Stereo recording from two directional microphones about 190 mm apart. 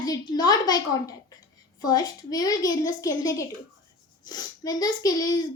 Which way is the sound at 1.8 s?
20° left (ahead or behind).